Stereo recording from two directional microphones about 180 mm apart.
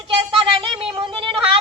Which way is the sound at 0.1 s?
30° right (ahead or behind).